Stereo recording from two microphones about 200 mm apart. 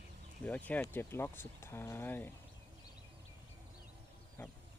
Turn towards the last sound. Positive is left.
turn(degrees=10)  # may be behind; listen again after turning